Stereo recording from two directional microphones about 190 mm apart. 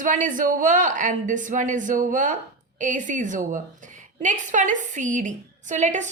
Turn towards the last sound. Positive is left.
turn(degrees=-40)  # may be behind; listen again after turning